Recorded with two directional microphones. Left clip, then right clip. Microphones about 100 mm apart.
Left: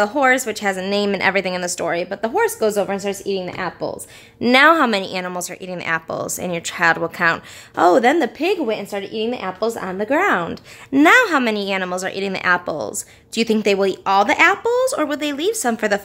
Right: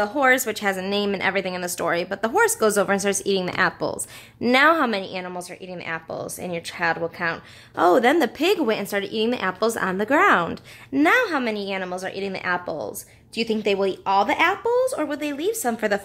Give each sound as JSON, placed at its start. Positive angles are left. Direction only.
{"t": 0.2, "sound": "a woman's voice", "side_deg": 10}
{"t": 1.8, "sound": "a woman's voice", "side_deg": 0}
{"t": 4.4, "sound": "a woman's voice", "side_deg": 20}
{"t": 7.9, "sound": "a woman's voice", "side_deg": 5}
{"t": 8.6, "sound": "a woman's voice", "side_deg": -20}
{"t": 10.1, "sound": "speech", "side_deg": 5}
{"t": 10.9, "sound": "a woman's voice", "side_deg": 40}